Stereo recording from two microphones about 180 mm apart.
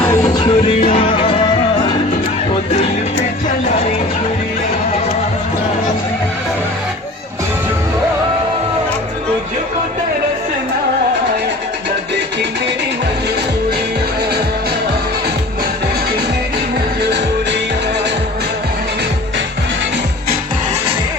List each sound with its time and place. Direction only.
0.3 s music: 30° left (ahead or behind)